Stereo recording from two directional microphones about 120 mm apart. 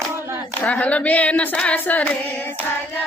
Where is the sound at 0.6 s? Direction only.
10° left (ahead or behind).